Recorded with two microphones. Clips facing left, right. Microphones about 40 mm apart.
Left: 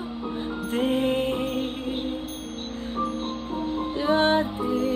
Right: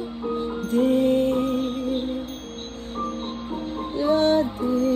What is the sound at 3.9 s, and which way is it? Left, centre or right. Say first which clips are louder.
Music: right 2 dB; left.